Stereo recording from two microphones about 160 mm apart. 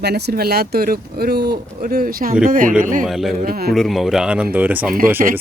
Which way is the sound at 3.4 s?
70° right (ahead or behind).